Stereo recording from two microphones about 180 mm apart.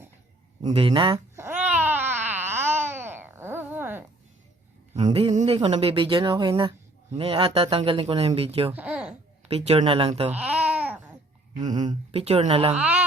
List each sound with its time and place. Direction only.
0.6 s speech: 30° right (ahead or behind)
1.4 s babbling: 10° right (ahead or behind)
5.0 s a woman's voice: 30° right (ahead or behind)
7.1 s a woman's voice: 30° right (ahead or behind)
8.7 s babbling: 5° right (ahead or behind)
9.5 s a woman's voice: 35° right (ahead or behind)
10.3 s babbling: 10° right (ahead or behind)
11.5 s a woman's voice: 45° right (ahead or behind)
12.7 s speech: 10° right (ahead or behind)